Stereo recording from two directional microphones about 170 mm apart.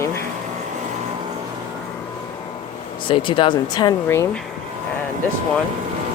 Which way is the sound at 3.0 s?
30° left (ahead or behind).